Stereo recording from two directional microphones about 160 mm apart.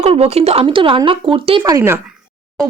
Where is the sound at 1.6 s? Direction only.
20° right (ahead or behind).